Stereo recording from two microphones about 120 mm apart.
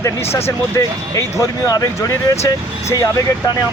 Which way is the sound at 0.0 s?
20° left (ahead or behind).